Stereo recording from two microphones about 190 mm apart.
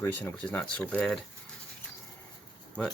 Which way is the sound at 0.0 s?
10° left (ahead or behind).